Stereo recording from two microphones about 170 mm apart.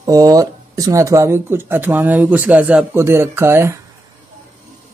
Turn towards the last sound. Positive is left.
turn(degrees=-15)  # may be behind; listen again after turning